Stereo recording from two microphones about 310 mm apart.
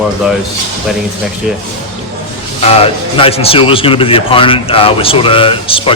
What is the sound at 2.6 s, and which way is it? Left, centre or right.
Speech, centre.